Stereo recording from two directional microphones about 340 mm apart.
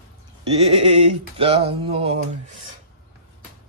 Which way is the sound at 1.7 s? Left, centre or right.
Centre.